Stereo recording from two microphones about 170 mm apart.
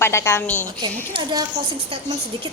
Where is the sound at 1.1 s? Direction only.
25° right (ahead or behind).